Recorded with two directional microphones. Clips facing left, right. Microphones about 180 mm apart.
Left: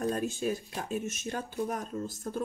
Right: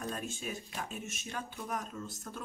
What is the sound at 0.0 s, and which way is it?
Speech, 35° left (ahead or behind).